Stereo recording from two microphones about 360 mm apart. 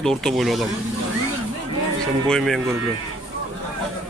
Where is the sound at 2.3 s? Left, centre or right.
Centre.